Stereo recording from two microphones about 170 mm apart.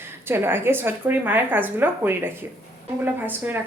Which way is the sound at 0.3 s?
15° right (ahead or behind).